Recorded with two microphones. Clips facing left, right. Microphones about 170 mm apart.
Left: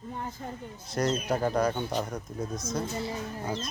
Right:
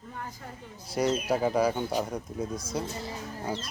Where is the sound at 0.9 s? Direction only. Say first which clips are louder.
Right 1 dB; 10° right (ahead or behind).